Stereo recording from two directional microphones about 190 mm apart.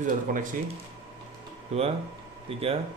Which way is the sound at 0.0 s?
45° right (ahead or behind).